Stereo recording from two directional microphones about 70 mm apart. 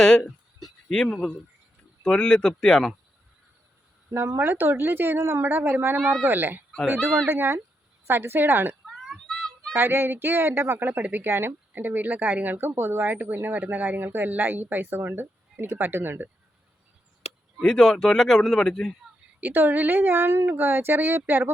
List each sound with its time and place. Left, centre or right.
0.0 s speech: centre
4.4 s a woman's voice: right
9.0 s child singing: centre
9.7 s a woman's voice: right
17.6 s speech: centre
19.4 s speech: right